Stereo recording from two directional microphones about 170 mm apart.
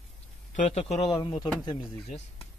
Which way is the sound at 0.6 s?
40° left (ahead or behind).